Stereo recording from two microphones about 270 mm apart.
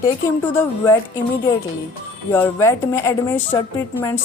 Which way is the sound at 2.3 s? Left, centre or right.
Centre.